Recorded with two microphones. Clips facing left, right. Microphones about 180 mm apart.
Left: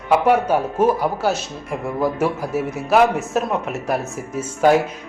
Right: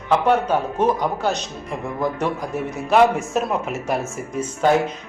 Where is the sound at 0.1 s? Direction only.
10° left (ahead or behind).